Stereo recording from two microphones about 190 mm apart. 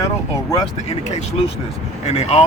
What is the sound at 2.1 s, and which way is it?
Speech, 35° left (ahead or behind).